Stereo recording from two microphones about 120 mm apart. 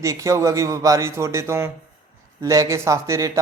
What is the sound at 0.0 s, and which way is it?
Speech, 25° right (ahead or behind).